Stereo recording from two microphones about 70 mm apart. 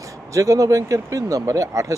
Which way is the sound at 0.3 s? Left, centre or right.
Right.